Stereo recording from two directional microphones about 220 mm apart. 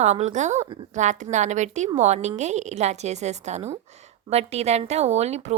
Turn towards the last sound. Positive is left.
turn(degrees=-30)  # may be behind; listen again after turning